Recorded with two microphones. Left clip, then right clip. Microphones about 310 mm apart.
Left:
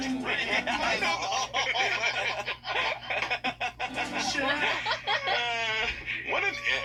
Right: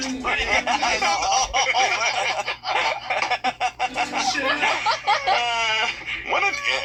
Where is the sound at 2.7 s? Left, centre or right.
Right.